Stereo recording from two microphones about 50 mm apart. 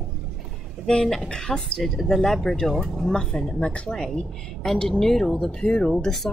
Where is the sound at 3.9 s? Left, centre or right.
Centre.